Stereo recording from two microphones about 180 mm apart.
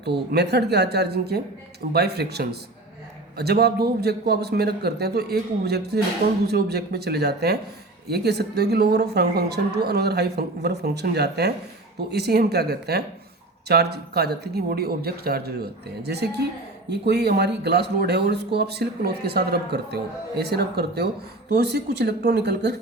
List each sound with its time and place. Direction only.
0.0 s speech: 65° right (ahead or behind)